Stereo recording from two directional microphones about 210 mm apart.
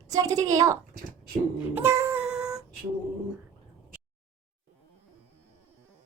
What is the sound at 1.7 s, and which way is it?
Child singing, 10° right (ahead or behind).